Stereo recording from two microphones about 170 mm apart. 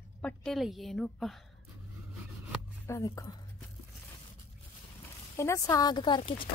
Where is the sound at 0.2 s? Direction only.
5° left (ahead or behind).